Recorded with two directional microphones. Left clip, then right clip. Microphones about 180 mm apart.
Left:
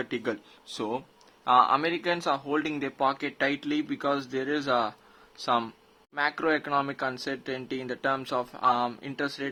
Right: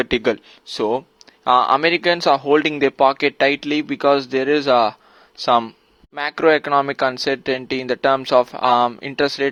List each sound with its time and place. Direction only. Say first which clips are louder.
0.0 s a man's voice: right 13 dB; 40° right (ahead or behind)
6.1 s a man's voice: right 10 dB; 40° right (ahead or behind)